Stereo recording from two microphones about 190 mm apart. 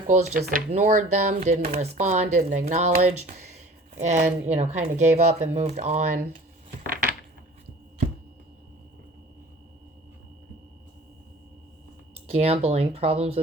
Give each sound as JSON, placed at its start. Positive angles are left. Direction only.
{"t": 0.1, "sound": "speech", "side_deg": -45}
{"t": 12.1, "sound": "speech", "side_deg": -35}